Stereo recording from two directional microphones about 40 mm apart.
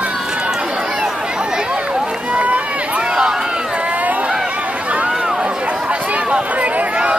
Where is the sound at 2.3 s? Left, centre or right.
Right.